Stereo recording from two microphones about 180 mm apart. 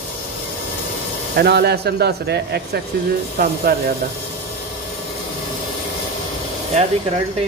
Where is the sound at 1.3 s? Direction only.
65° right (ahead or behind).